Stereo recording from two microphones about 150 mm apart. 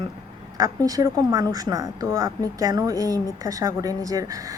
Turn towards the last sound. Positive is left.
turn(degrees=-25)  # may be behind; listen again after turning